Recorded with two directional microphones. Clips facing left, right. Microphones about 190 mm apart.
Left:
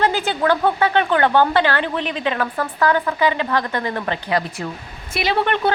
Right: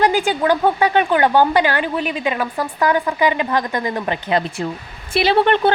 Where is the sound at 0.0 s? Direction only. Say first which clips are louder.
Right 2 dB; 15° right (ahead or behind).